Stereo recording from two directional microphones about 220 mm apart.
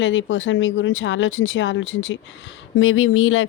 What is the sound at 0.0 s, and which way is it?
Speech, 60° left (ahead or behind).